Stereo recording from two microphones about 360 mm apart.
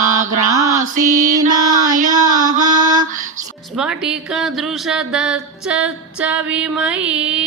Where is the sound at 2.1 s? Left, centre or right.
Centre.